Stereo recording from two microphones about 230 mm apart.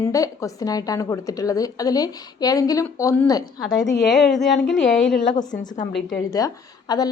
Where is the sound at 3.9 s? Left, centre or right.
Left.